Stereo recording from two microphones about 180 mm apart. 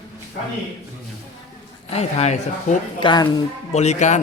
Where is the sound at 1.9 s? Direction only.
35° left (ahead or behind).